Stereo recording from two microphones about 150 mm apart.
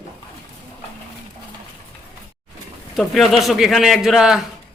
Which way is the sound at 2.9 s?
Centre (ahead or behind).